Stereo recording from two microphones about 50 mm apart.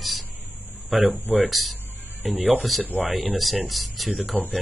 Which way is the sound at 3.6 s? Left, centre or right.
Centre.